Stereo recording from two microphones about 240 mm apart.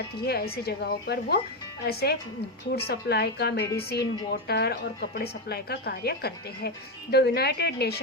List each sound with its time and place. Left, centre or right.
0.3 s a woman's voice: left